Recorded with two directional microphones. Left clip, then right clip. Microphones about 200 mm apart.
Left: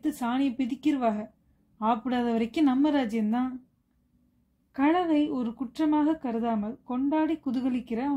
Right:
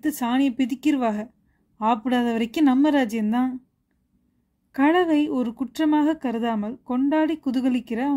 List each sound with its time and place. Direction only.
0.0 s speech: 40° right (ahead or behind)
4.7 s speech: 40° right (ahead or behind)